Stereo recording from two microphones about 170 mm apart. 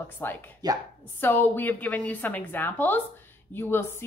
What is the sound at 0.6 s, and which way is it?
Speech, 25° right (ahead or behind).